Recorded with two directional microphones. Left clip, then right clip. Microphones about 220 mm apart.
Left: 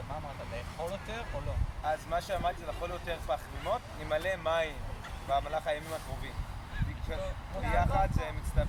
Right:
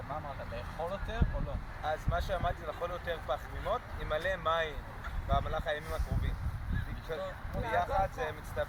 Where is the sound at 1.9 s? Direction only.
10° right (ahead or behind).